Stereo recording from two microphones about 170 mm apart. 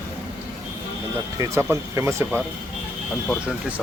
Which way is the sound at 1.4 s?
15° right (ahead or behind).